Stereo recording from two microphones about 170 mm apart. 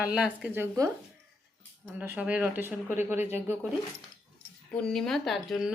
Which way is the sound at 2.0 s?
5° right (ahead or behind).